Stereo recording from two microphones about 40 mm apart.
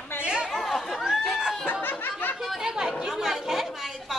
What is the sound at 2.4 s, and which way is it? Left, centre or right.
Chatter, centre.